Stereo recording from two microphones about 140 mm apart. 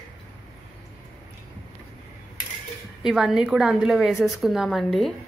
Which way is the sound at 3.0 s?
5° right (ahead or behind).